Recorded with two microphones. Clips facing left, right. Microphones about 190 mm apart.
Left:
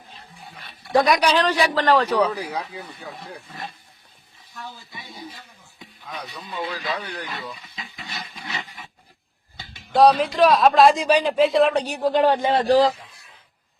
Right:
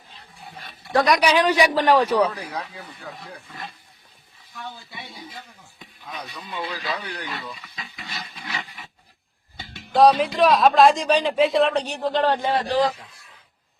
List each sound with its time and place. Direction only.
1.2 s a man's voice: 10° right (ahead or behind)
2.3 s speech: 10° left (ahead or behind)
6.4 s speech: centre (ahead or behind)
8.0 s wild animals: 20° left (ahead or behind)
9.9 s speech: centre (ahead or behind)
11.8 s speech: 10° left (ahead or behind)
12.5 s a man's voice: 35° left (ahead or behind)